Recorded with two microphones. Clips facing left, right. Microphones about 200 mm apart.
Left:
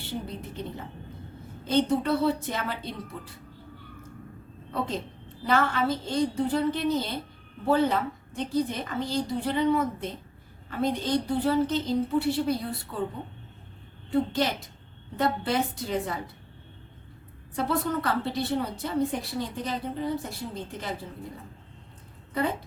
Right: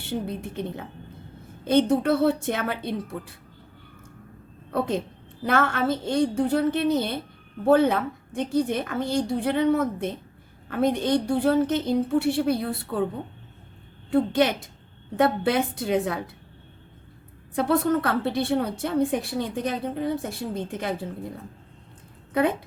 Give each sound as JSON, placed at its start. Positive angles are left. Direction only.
{"t": 0.1, "sound": "a woman's voice", "side_deg": -60}
{"t": 5.4, "sound": "a woman's voice", "side_deg": -55}
{"t": 14.1, "sound": "a woman's voice", "side_deg": -55}
{"t": 15.1, "sound": "a woman's voice", "side_deg": -65}
{"t": 17.5, "sound": "a woman's voice", "side_deg": -50}
{"t": 22.3, "sound": "speech", "side_deg": -65}